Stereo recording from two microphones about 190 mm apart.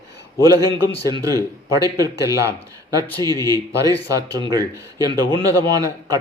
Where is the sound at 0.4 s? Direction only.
20° right (ahead or behind).